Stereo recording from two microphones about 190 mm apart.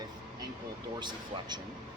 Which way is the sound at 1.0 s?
25° right (ahead or behind).